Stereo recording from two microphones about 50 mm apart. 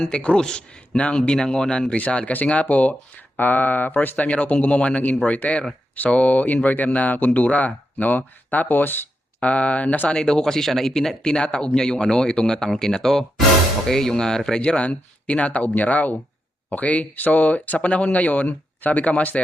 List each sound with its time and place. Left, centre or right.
0.2 s a man's voice: centre
2.0 s speech: left
9.4 s speech: left
10.1 s a man's voice: centre
11.2 s a man's voice: centre
14.6 s speech: left